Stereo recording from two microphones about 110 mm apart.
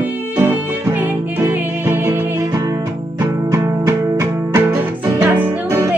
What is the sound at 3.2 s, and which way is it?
Music, 30° right (ahead or behind).